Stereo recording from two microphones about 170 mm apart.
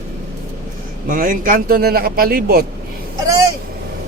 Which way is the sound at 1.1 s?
55° right (ahead or behind).